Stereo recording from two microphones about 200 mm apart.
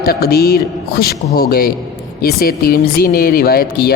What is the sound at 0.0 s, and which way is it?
Speech, 50° left (ahead or behind).